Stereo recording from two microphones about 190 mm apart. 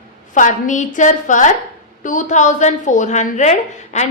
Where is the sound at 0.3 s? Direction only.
40° left (ahead or behind).